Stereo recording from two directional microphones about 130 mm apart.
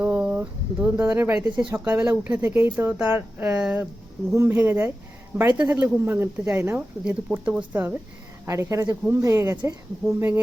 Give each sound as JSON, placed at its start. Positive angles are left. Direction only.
{"t": 0.0, "sound": "a sound", "side_deg": -10}
{"t": 1.7, "sound": "speech", "side_deg": -15}
{"t": 7.0, "sound": "speech", "side_deg": -5}